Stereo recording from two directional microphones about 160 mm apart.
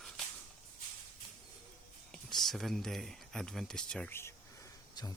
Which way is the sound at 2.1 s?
Centre (ahead or behind).